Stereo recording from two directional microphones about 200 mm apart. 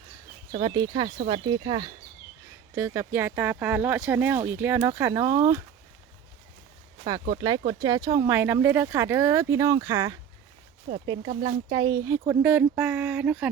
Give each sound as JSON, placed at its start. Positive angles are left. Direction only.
{"t": 0.5, "sound": "speech", "side_deg": -20}
{"t": 7.7, "sound": "speech", "side_deg": -20}
{"t": 11.3, "sound": "speech", "side_deg": -35}
{"t": 11.7, "sound": "speech", "side_deg": -20}